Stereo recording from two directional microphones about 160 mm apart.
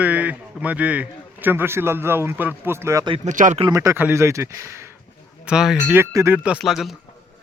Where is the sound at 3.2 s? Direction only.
50° right (ahead or behind).